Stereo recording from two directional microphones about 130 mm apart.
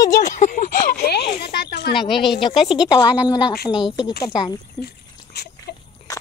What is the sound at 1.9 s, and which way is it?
A woman's voice, 35° left (ahead or behind).